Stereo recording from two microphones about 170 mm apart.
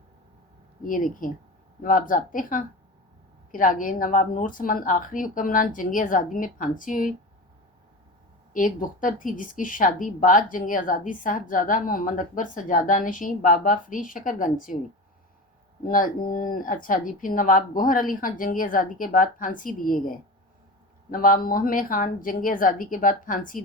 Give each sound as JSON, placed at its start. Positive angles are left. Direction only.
{"t": 0.8, "sound": "speech", "side_deg": 50}
{"t": 8.5, "sound": "speech", "side_deg": 50}
{"t": 15.8, "sound": "speech", "side_deg": 55}